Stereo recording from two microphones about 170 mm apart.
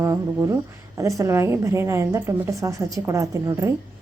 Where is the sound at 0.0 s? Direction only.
20° right (ahead or behind).